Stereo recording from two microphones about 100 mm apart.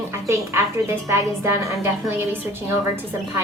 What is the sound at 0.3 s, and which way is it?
A woman's voice, 30° right (ahead or behind).